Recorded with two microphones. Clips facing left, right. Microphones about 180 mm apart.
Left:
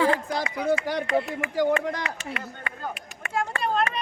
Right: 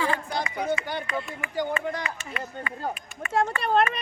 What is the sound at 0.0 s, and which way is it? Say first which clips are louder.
Speech: left 4 dB; 80° left.